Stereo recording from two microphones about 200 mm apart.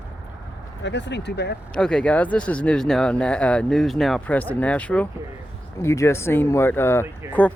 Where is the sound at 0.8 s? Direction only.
65° left (ahead or behind).